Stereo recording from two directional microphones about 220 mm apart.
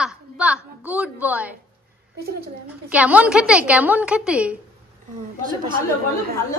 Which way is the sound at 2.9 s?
5° right (ahead or behind).